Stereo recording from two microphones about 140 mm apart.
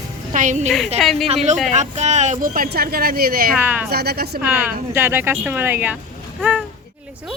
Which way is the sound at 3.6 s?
10° right (ahead or behind).